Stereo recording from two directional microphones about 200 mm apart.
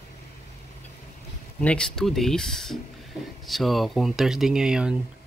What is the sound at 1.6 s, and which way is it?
Speech, 5° left (ahead or behind).